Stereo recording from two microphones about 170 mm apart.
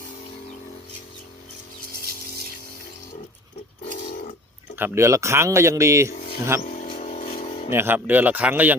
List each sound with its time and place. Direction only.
4.8 s a man's voice: 15° right (ahead or behind)
6.6 s speech: 45° left (ahead or behind)
7.0 s vehicle: 45° left (ahead or behind)
7.7 s a man's voice: 15° right (ahead or behind)